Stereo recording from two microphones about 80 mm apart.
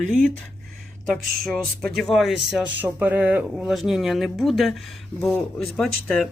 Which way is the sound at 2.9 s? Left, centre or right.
Right.